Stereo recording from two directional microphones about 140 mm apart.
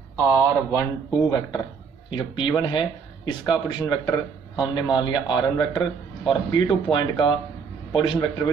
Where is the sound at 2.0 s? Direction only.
35° left (ahead or behind).